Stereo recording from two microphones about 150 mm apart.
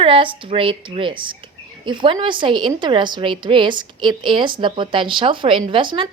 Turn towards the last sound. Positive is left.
turn(degrees=-35)  # may be behind; listen again after turning